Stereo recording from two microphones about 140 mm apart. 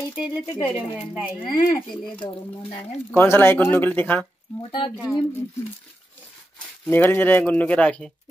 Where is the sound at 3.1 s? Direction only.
15° left (ahead or behind).